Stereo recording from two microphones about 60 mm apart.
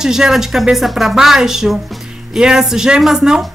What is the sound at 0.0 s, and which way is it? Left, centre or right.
A woman's voice, centre.